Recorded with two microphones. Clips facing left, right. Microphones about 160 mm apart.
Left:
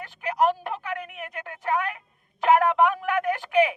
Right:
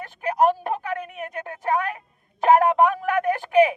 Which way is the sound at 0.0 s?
45° right (ahead or behind).